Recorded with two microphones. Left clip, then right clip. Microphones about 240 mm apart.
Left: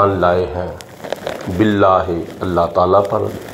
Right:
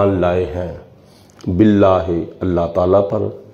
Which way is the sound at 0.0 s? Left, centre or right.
Right.